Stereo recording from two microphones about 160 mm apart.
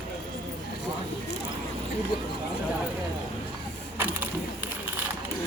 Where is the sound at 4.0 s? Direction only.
15° right (ahead or behind).